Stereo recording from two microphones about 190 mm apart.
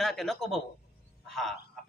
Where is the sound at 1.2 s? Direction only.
Centre (ahead or behind).